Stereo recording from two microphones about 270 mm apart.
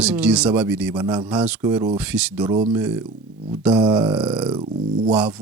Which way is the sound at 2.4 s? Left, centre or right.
Centre.